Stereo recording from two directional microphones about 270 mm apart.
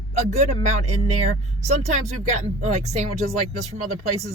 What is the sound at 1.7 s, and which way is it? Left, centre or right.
A woman's voice, right.